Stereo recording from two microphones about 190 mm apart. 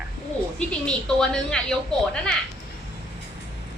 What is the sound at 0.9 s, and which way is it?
Speech, 5° left (ahead or behind).